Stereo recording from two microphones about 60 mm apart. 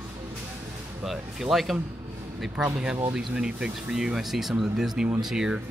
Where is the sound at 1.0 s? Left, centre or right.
Centre.